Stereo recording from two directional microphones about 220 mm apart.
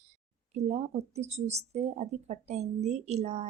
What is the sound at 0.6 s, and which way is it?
Speech, 30° right (ahead or behind).